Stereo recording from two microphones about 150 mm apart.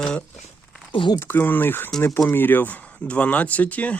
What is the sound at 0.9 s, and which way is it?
Speech, 30° left (ahead or behind).